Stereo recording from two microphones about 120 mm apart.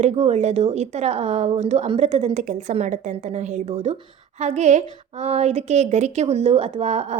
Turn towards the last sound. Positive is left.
turn(degrees=-65)  # may be behind; listen again after turning